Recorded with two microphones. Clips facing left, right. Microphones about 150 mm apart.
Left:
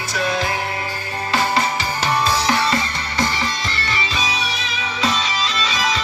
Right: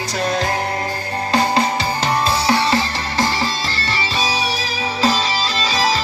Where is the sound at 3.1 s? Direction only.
40° right (ahead or behind).